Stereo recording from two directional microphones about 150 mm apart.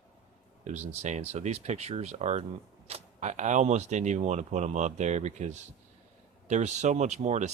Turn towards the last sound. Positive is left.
turn(degrees=-50)  # may be behind; listen again after turning